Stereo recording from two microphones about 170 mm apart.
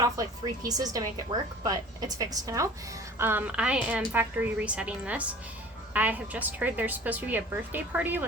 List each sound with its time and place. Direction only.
0.0 s a woman's voice: 20° right (ahead or behind)